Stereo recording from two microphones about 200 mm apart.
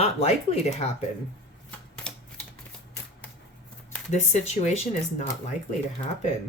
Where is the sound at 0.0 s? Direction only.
30° left (ahead or behind).